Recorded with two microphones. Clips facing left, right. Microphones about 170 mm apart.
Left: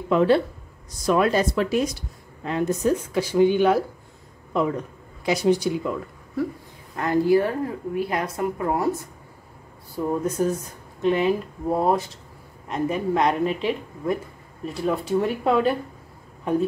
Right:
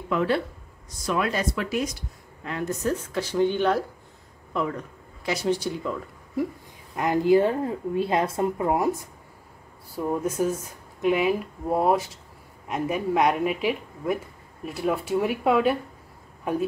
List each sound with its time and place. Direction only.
0.1 s speech: 25° left (ahead or behind)
1.0 s speech: 35° left (ahead or behind)
2.4 s speech: 20° left (ahead or behind)
5.2 s speech: 15° left (ahead or behind)
7.0 s a woman's voice: 20° right (ahead or behind)
9.9 s speech: 5° right (ahead or behind)